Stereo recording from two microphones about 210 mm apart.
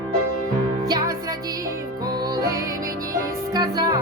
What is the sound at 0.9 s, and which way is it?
Music, 15° right (ahead or behind).